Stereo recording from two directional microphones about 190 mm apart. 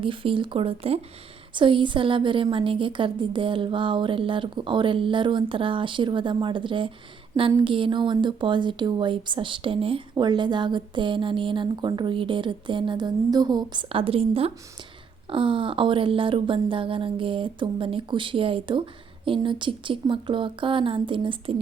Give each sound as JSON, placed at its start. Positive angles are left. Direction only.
{"t": 0.0, "sound": "a woman's voice", "side_deg": -30}